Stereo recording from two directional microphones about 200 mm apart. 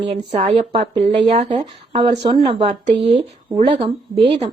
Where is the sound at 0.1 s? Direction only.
30° right (ahead or behind).